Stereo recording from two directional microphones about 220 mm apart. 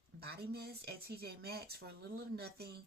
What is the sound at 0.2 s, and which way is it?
Speech, 45° right (ahead or behind).